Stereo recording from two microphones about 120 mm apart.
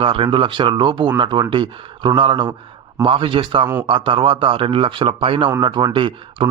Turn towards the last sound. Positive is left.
turn(degrees=-45)  # may be behind; listen again after turning